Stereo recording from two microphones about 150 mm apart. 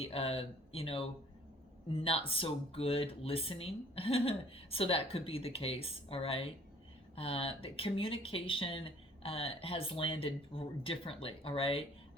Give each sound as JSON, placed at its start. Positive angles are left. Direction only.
{"t": 0.0, "sound": "speech", "side_deg": 40}